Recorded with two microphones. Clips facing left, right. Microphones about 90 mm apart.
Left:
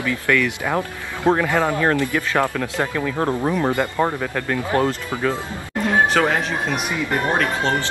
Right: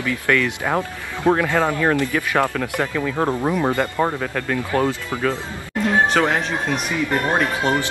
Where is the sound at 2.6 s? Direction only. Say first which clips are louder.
Even; 25° left (ahead or behind).